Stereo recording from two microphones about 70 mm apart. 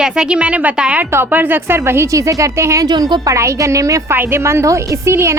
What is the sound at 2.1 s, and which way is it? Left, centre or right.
Speech, right.